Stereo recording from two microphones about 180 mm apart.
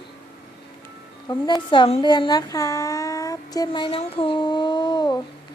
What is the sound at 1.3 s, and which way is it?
A woman's voice, 25° left (ahead or behind).